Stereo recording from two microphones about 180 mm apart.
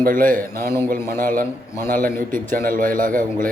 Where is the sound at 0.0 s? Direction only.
50° right (ahead or behind).